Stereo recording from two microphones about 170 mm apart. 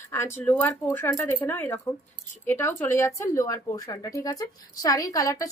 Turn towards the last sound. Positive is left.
turn(degrees=20)  # may be behind; listen again after turning